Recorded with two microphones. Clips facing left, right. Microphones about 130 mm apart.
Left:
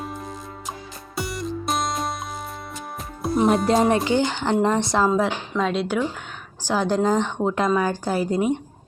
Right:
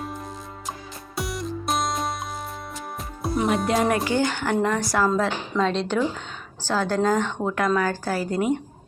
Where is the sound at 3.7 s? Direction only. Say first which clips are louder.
Left 3 dB; 25° left (ahead or behind).